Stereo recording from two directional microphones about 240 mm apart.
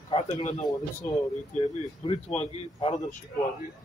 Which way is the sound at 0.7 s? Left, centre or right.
Centre.